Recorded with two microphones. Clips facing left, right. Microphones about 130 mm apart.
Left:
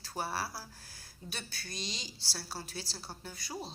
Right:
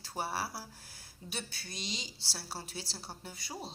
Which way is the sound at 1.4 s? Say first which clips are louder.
Even; 10° right (ahead or behind).